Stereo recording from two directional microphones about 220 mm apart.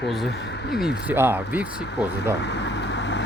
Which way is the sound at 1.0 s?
10° right (ahead or behind).